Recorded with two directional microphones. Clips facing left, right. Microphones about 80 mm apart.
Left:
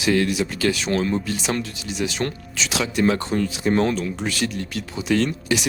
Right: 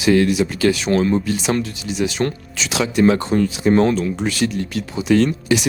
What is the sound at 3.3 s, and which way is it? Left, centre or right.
Speech, right.